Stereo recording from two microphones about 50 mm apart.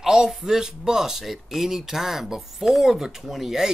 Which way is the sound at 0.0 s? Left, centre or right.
Centre.